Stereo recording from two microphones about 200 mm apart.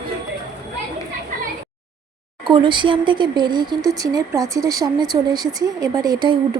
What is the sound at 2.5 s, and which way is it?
Speech, 25° right (ahead or behind).